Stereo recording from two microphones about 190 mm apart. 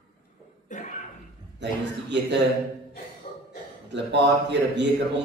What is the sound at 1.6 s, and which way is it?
Speech, 70° right (ahead or behind).